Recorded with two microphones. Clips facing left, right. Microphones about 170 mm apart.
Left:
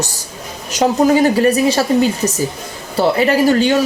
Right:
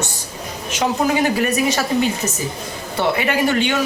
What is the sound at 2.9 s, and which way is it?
Speech, 35° left (ahead or behind).